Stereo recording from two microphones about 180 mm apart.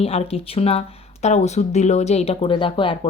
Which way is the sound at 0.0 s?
35° left (ahead or behind).